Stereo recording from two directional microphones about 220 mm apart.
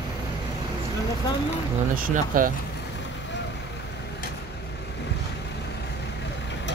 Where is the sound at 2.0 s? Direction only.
40° right (ahead or behind).